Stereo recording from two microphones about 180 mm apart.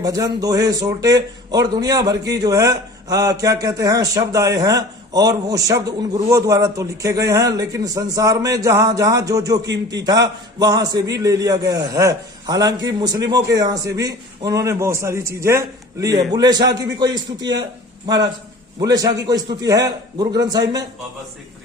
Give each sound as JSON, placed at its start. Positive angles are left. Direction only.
{"t": 0.0, "sound": "a man's voice", "side_deg": -20}